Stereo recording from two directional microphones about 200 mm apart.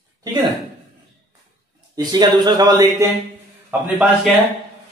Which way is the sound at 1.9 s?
20° right (ahead or behind).